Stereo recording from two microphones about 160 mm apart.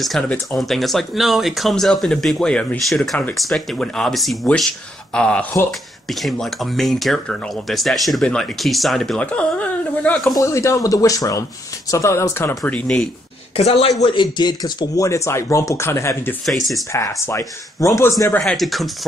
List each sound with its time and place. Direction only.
0.0 s speech: centre (ahead or behind)
5.7 s speech: centre (ahead or behind)
10.3 s speech: 20° left (ahead or behind)
13.6 s speech: 40° left (ahead or behind); by 16.3 s 15° left (ahead or behind)
16.4 s speech: centre (ahead or behind)
16.9 s speech: 20° left (ahead or behind)
18.4 s speech: centre (ahead or behind)